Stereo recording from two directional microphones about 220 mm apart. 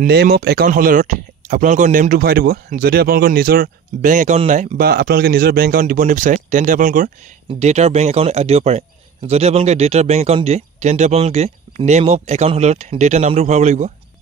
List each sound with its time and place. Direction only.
0.0 s speech: 45° right (ahead or behind)